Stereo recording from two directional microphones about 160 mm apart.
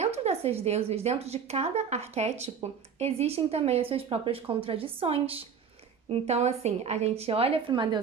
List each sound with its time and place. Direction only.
0.0 s speech: 40° right (ahead or behind)